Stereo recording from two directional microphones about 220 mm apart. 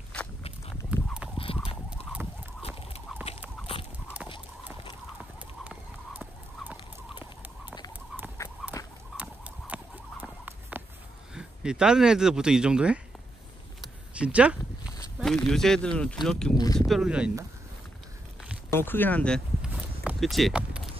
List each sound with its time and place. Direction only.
0.1 s walk: 5° left (ahead or behind)
0.8 s fowl: 5° right (ahead or behind)
2.6 s fowl: 25° left (ahead or behind)
5.6 s horse: 5° right (ahead or behind)
8.8 s rodents: 15° left (ahead or behind)
9.1 s rodents: 5° right (ahead or behind)
10.2 s a sound: 10° right (ahead or behind)
11.3 s speech: 5° right (ahead or behind)
14.1 s speech: 5° right (ahead or behind)
16.5 s speech: 15° left (ahead or behind)
16.8 s speech: centre (ahead or behind)
18.7 s speech: 10° left (ahead or behind)
19.7 s a sound: 5° right (ahead or behind)